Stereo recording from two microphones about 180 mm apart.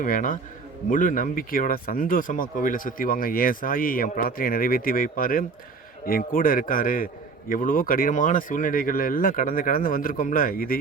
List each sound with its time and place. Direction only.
0.0 s speech: 50° left (ahead or behind)